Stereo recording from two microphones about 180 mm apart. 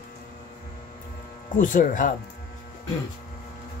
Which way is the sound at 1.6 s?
45° left (ahead or behind).